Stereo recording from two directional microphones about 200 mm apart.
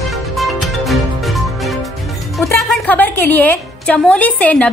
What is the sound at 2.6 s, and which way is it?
A woman's voice, centre (ahead or behind).